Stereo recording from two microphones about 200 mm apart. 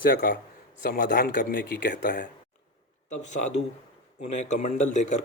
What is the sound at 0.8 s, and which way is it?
Speech, 50° left (ahead or behind).